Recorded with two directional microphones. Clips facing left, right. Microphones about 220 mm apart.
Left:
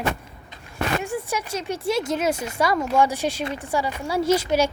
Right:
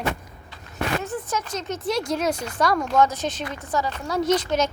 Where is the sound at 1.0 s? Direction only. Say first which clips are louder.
Left 1 dB; 10° left (ahead or behind).